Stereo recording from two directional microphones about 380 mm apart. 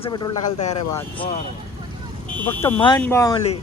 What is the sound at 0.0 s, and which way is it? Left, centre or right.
Speech, centre.